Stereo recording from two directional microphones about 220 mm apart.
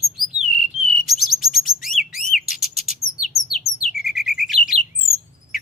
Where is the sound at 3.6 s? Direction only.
Centre (ahead or behind).